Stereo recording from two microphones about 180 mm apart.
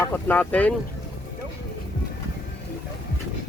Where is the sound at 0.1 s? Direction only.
10° left (ahead or behind).